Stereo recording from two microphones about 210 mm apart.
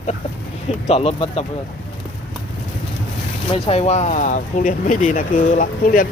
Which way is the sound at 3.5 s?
30° left (ahead or behind).